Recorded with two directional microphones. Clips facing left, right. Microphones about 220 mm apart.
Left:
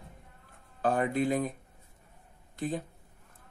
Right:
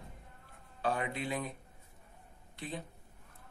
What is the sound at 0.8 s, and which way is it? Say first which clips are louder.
Speech: left 7 dB; 45° left (ahead or behind).